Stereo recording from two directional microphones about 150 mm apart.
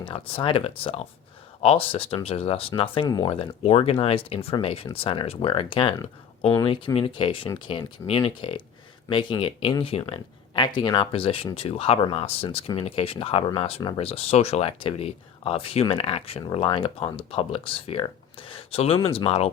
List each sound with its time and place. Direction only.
0.0 s speech: 35° left (ahead or behind)